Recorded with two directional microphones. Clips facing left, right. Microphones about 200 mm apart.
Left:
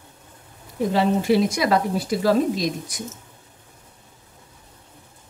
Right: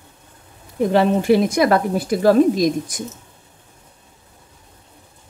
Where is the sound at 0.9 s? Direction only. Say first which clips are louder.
Right 4 dB; 55° right (ahead or behind).